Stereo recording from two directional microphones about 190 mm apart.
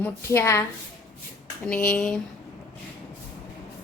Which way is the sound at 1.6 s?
5° left (ahead or behind).